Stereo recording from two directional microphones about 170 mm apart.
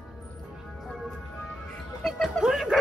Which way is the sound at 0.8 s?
Centre (ahead or behind).